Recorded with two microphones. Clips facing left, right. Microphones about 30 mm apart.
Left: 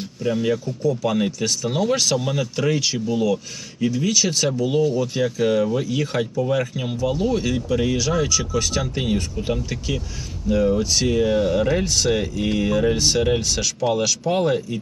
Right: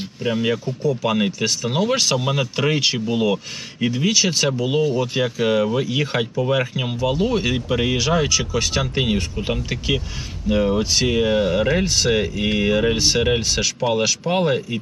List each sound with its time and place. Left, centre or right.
0.0 s speech: right
10.8 s speech: right